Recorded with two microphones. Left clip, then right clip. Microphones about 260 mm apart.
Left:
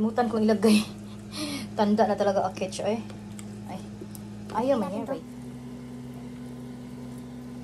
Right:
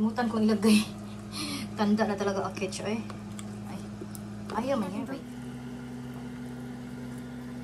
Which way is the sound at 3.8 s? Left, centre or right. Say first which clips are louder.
Even; centre.